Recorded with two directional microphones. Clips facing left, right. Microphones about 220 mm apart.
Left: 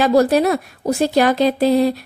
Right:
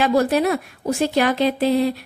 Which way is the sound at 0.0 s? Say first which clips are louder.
Left 4 dB; 40° left (ahead or behind).